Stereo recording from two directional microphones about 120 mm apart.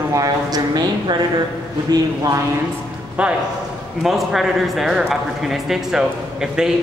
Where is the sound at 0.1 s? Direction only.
30° right (ahead or behind).